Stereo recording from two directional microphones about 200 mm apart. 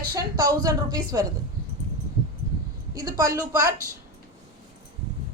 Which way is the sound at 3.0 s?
20° right (ahead or behind).